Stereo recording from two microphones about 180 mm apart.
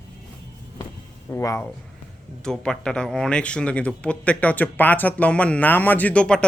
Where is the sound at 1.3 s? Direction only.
15° left (ahead or behind).